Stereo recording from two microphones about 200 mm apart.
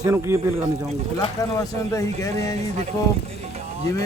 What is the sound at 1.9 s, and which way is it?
Speech, 15° left (ahead or behind).